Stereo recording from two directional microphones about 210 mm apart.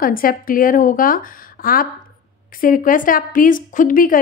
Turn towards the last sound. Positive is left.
turn(degrees=40)  # may be behind; listen again after turning